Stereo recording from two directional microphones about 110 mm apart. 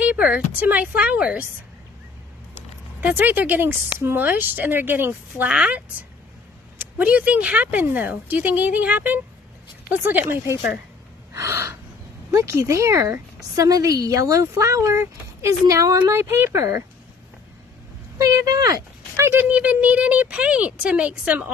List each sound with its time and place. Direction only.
0.0 s speech: 10° right (ahead or behind)
2.5 s speech: 15° right (ahead or behind)
5.5 s speech: 10° right (ahead or behind)
11.3 s gasp: 30° right (ahead or behind)
12.3 s a woman's voice: 25° right (ahead or behind)
18.1 s speech: 30° right (ahead or behind)
19.5 s speech: 15° right (ahead or behind)